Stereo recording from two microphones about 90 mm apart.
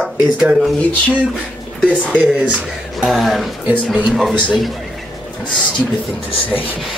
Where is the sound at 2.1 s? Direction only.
15° right (ahead or behind).